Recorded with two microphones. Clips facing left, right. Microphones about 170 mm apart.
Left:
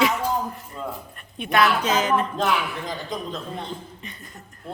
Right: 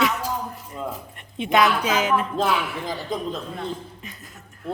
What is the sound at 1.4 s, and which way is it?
Speech, 20° right (ahead or behind).